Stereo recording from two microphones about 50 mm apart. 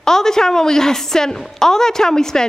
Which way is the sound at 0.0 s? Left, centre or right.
Centre.